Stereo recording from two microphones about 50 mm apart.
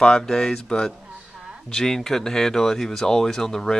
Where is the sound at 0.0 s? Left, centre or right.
Centre.